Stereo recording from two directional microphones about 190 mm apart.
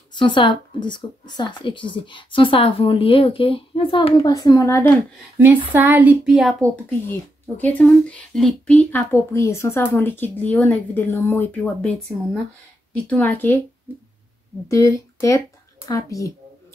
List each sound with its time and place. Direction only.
0.1 s speech: 25° left (ahead or behind)
5.4 s a woman's voice: 10° right (ahead or behind)
7.1 s speech: 10° left (ahead or behind)
13.1 s speech: 10° left (ahead or behind)
13.9 s speech: 10° right (ahead or behind)
14.7 s speech: 15° left (ahead or behind)